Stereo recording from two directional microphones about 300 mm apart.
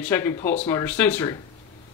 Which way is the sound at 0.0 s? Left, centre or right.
Centre.